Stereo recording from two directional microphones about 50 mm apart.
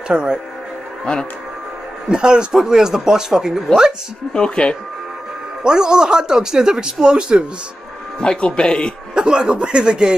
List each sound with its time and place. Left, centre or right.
0.1 s speech: centre
2.0 s speech: centre
4.3 s speech: centre
5.6 s speech: centre
8.2 s speech: left
9.1 s speech: centre